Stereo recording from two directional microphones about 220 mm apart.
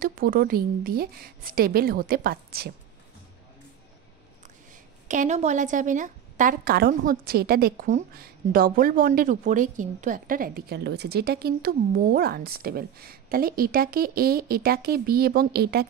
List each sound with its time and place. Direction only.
0.0 s a woman's voice: 40° right (ahead or behind)
5.0 s a woman's voice: 35° right (ahead or behind)